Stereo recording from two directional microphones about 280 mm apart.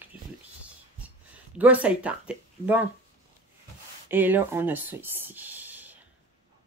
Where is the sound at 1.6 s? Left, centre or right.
Centre.